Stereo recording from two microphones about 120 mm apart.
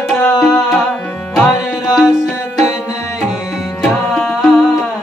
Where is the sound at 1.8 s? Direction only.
5° right (ahead or behind).